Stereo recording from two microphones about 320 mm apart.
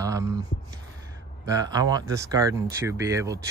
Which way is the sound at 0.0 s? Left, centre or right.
Centre.